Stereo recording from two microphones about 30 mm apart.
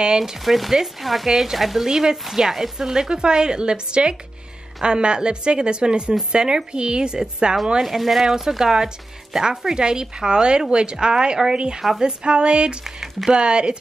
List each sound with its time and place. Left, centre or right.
0.2 s speech: centre
1.9 s speech: right
2.2 s speech: centre
2.9 s a woman's voice: right
7.8 s speech: centre
9.8 s a woman's voice: right
12.8 s speech: centre
13.3 s a woman's voice: right